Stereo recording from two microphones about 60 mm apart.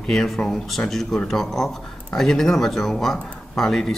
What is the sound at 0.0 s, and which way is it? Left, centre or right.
Speech, centre.